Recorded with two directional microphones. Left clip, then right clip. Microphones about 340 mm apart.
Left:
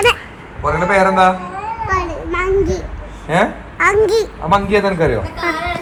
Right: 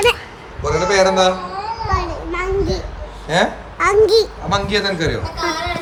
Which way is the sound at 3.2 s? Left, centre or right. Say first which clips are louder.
Left 1 dB; centre.